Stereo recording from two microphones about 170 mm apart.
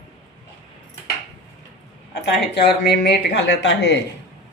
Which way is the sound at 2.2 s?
75° left (ahead or behind).